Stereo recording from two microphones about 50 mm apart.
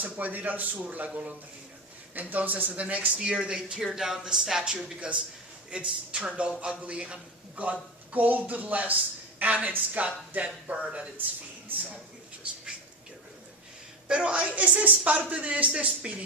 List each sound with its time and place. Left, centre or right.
0.0 s speech: right
3.2 s speech: centre
4.9 s a man's voice: right
14.1 s a man's voice: centre